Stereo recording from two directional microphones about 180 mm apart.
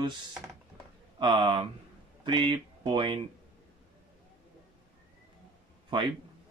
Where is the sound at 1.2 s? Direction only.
25° right (ahead or behind).